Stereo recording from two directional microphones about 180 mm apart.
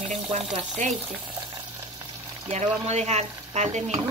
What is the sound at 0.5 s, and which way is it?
Speech, 40° right (ahead or behind).